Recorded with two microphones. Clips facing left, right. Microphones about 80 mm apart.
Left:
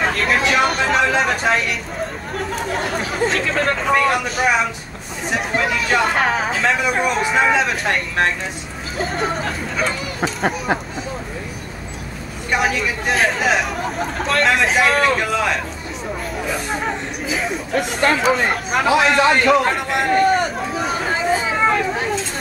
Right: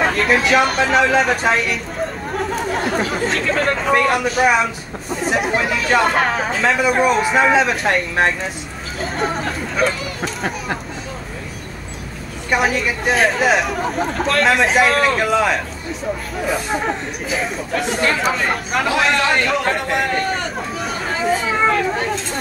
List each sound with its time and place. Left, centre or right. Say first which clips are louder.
0.0 s speech: right 2 dB; centre
12.4 s speech: right 2 dB; centre
16.7 s a man's voice: right 2 dB; centre
21.5 s children playing: right 1 dB; centre